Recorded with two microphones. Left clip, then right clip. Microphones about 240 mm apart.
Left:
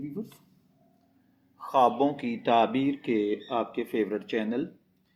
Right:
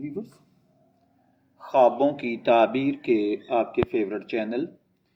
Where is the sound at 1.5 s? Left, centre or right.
Left.